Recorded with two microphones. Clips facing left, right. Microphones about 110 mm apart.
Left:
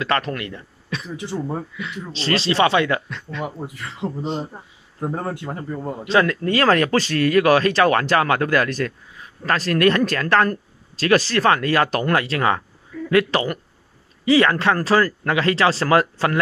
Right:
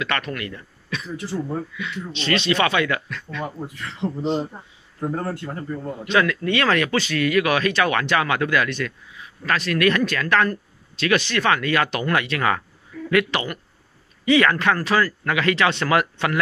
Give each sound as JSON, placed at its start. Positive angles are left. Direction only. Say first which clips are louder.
{"t": 0.0, "sound": "a man's voice", "louder": "left 4 dB", "side_deg": 30}
{"t": 2.1, "sound": "a man's voice", "louder": "left 2 dB", "side_deg": 30}
{"t": 4.0, "sound": "a man's voice", "louder": "right 2 dB", "side_deg": 0}
{"t": 5.2, "sound": "a man's voice", "louder": "left 1 dB", "side_deg": 15}
{"t": 6.0, "sound": "speech", "louder": "left 2 dB", "side_deg": 35}